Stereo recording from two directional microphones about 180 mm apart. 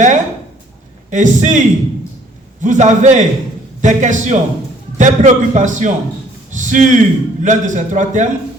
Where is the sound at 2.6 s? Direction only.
40° right (ahead or behind).